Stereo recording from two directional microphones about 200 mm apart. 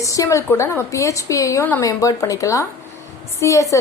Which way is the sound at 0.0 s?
15° left (ahead or behind).